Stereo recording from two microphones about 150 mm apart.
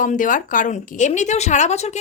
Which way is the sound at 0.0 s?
60° left (ahead or behind).